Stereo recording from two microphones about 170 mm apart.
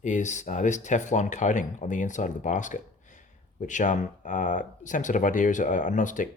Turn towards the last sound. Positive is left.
turn(degrees=50)  # may be behind; listen again after turning